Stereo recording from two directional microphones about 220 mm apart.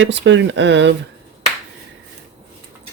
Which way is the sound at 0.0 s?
55° right (ahead or behind).